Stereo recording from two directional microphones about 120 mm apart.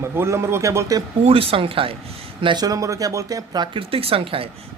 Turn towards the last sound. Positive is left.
turn(degrees=-50)  # may be behind; listen again after turning